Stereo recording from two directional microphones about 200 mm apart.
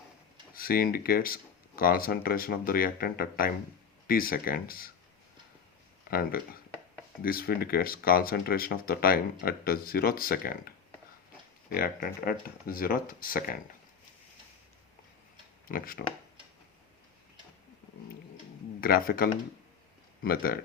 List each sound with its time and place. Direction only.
0.5 s speech: 45° left (ahead or behind)
6.1 s speech: 45° left (ahead or behind)
11.7 s speech: 45° left (ahead or behind)
15.6 s speech: 45° left (ahead or behind)
18.8 s speech: 45° left (ahead or behind)